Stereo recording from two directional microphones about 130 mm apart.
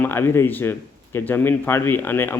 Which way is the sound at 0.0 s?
15° left (ahead or behind).